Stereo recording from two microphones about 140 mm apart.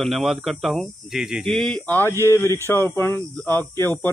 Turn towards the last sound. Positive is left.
turn(degrees=15)  # may be behind; listen again after turning